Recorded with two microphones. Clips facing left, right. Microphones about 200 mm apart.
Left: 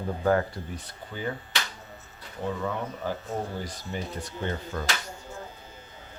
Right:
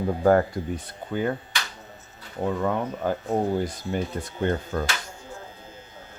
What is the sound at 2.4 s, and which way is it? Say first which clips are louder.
Speech: right 5 dB; 55° right (ahead or behind).